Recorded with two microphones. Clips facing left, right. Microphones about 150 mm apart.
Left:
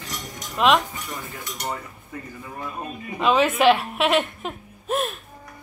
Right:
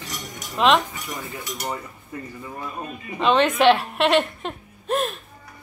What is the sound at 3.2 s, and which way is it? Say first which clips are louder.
A woman's voice: right 1 dB; 5° left (ahead or behind).